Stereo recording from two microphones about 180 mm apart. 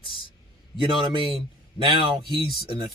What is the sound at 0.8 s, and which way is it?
Speech, 30° right (ahead or behind).